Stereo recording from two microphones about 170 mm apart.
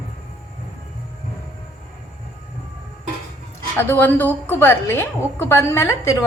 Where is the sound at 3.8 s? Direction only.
10° left (ahead or behind).